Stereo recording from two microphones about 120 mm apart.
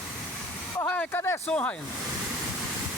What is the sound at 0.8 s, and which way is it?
Speech, 20° left (ahead or behind).